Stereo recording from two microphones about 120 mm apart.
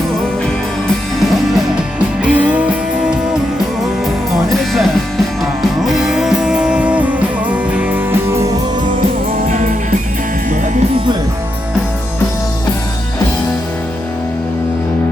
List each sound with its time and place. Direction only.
2.2 s music: 10° right (ahead or behind)
4.4 s music: centre (ahead or behind)
9.5 s music: 90° right